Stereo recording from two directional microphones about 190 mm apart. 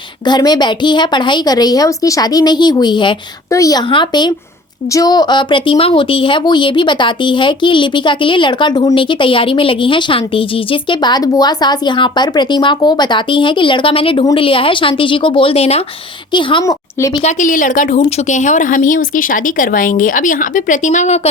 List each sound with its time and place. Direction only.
0.3 s a woman's voice: 20° left (ahead or behind)
17.2 s a woman's voice: 45° left (ahead or behind)